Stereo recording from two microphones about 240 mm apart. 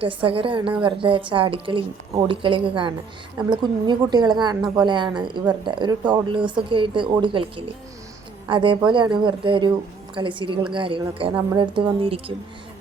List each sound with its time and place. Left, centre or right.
0.0 s a woman's voice: right